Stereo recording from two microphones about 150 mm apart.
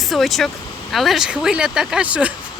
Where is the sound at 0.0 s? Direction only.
Centre (ahead or behind).